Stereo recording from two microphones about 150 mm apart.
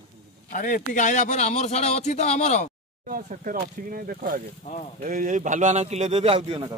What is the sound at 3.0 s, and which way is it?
Speech, 65° right (ahead or behind).